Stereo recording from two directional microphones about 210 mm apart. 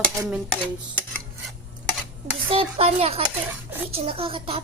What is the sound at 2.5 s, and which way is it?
Speech, 25° right (ahead or behind).